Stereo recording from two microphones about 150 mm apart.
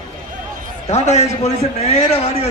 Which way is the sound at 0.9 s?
45° left (ahead or behind).